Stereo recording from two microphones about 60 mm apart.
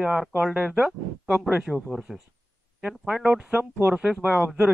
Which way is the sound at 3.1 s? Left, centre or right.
Centre.